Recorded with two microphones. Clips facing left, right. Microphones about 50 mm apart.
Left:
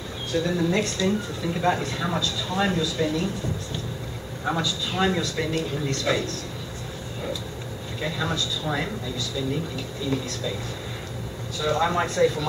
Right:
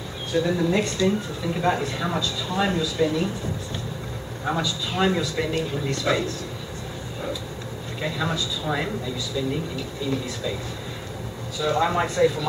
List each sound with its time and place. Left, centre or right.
0.3 s speech: centre
4.5 s speech: centre
8.0 s speech: centre
11.5 s speech: centre